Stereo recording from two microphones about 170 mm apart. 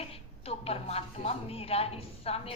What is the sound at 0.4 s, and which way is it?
A woman's voice, 35° left (ahead or behind).